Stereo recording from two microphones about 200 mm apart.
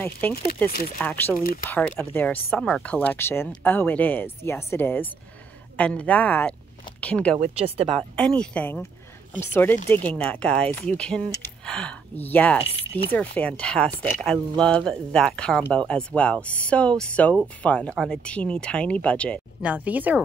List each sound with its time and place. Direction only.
0.3 s speech: 50° left (ahead or behind)
1.0 s speech: 10° left (ahead or behind)
7.3 s speech: 30° right (ahead or behind)
7.9 s speech: 5° left (ahead or behind)
19.6 s speech: 5° right (ahead or behind)